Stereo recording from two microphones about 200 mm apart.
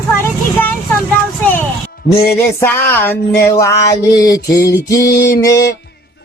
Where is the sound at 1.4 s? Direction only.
10° left (ahead or behind).